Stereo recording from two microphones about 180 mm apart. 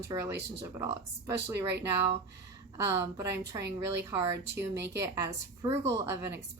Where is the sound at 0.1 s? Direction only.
15° right (ahead or behind).